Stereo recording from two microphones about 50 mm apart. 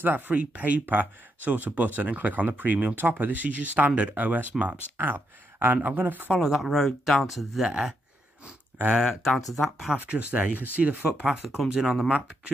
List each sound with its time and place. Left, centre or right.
0.3 s speech: right
4.9 s speech: right
6.4 s speech: centre
8.9 s speech: centre
9.2 s speech: centre
9.9 s speech: right
11.4 s speech: centre